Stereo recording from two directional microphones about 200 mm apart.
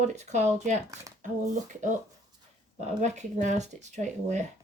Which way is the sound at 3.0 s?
35° right (ahead or behind).